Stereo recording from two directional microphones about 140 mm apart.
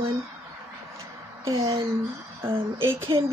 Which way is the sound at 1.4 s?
25° right (ahead or behind).